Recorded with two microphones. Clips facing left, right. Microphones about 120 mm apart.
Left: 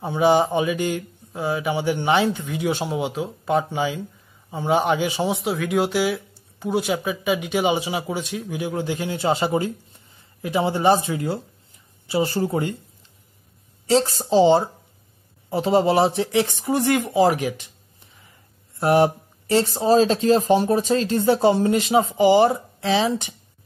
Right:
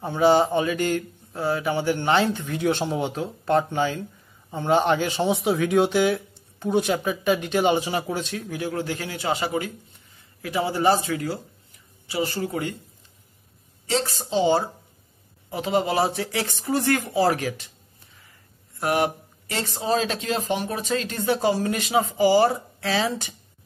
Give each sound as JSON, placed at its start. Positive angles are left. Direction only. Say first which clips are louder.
{"t": 0.0, "sound": "speech", "louder": "left 1 dB", "side_deg": 15}
{"t": 5.3, "sound": "speech", "louder": "right 2 dB", "side_deg": 0}
{"t": 13.8, "sound": "speech", "louder": "left 6 dB", "side_deg": 30}
{"t": 18.8, "sound": "speech", "louder": "left 6 dB", "side_deg": 30}